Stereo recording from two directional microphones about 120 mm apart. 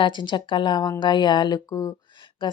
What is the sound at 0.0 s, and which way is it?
Speech, 40° left (ahead or behind).